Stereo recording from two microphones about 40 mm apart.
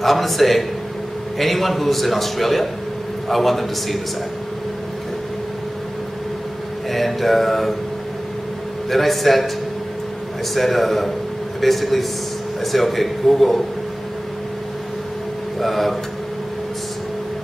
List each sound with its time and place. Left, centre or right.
0.0 s a man's voice: centre
6.9 s a man's voice: centre
8.9 s a man's voice: centre
10.5 s a man's voice: centre
15.6 s a man's voice: centre